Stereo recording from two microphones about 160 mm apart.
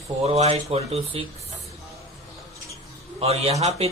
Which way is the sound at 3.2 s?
40° right (ahead or behind).